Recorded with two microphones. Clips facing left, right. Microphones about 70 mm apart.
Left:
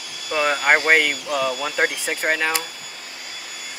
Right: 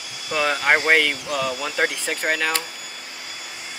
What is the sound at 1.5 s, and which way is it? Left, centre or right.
Speech, centre.